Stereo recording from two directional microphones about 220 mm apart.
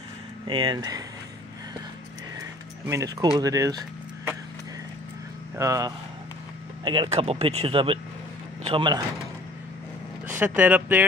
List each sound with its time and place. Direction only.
0.5 s speech: 20° right (ahead or behind)
2.9 s speech: 15° right (ahead or behind)
5.6 s speech: 15° right (ahead or behind)
10.2 s speech: 10° right (ahead or behind)